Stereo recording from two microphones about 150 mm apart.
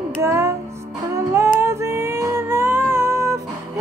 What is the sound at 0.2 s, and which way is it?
Music, 20° right (ahead or behind).